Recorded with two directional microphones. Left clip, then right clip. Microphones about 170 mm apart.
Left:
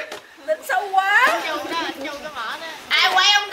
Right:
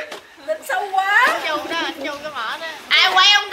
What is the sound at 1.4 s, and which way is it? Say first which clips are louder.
Chatter: right 2 dB; 45° right (ahead or behind).